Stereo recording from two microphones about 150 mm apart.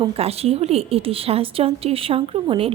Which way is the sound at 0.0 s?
40° right (ahead or behind).